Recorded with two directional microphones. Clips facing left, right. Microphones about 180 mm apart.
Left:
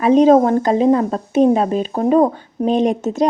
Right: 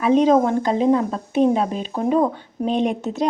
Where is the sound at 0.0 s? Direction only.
40° left (ahead or behind).